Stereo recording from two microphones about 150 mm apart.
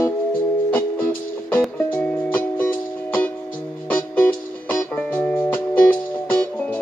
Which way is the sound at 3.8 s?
10° left (ahead or behind).